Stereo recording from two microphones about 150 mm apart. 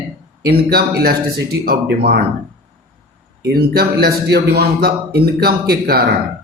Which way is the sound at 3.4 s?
90° right.